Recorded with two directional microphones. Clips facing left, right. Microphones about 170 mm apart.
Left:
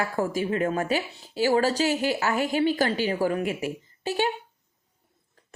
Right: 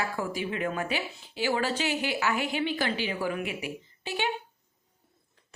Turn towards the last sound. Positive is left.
turn(degrees=40)  # may be behind; listen again after turning